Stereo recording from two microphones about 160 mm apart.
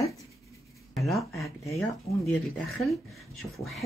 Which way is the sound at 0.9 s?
Centre (ahead or behind).